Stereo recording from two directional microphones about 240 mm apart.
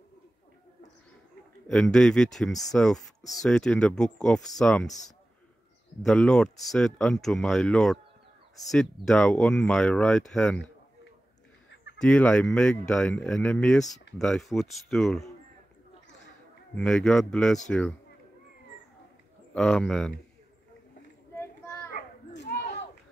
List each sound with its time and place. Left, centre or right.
1.7 s speech: centre
6.0 s speech: centre
12.0 s speech: centre
16.7 s speech: centre
19.5 s speech: centre
21.4 s a sound: centre
21.9 s children playing: left